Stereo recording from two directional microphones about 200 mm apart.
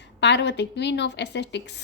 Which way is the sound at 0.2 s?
60° left (ahead or behind).